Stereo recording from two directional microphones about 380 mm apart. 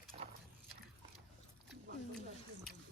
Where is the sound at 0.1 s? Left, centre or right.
Centre.